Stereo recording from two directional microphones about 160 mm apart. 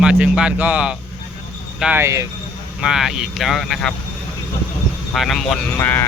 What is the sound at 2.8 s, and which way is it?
Speech, centre (ahead or behind).